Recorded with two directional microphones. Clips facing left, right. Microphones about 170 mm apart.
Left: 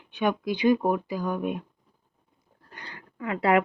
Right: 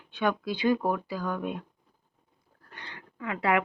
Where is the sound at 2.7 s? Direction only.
40° left (ahead or behind).